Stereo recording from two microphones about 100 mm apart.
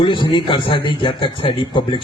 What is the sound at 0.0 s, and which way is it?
A man's voice, 55° left (ahead or behind).